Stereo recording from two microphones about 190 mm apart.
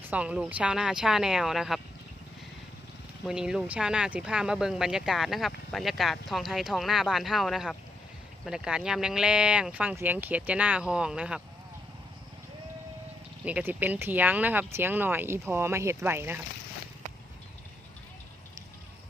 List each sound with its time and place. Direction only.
0.1 s speech: 5° right (ahead or behind)
3.2 s speech: 5° right (ahead or behind)
13.4 s speech: 10° right (ahead or behind)